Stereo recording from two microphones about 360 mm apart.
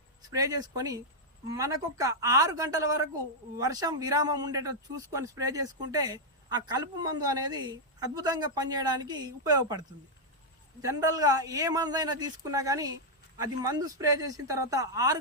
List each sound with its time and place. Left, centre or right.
0.2 s speech: centre